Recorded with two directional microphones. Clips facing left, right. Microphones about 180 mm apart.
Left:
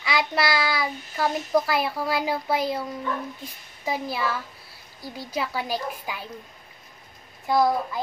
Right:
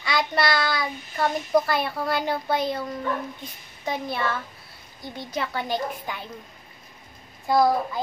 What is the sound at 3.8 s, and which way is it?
A woman's voice, 5° left (ahead or behind).